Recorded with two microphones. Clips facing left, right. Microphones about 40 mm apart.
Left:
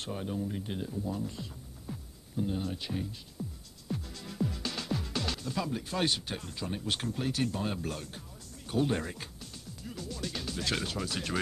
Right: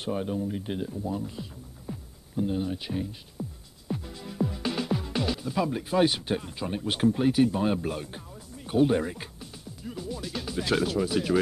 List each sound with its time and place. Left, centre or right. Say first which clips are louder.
0.0 s speech: right 6 dB; centre
3.3 s music: right 4 dB; centre
5.9 s speech: right 9 dB; centre
8.6 s music: right 7 dB; centre
10.2 s speech: right 3 dB; centre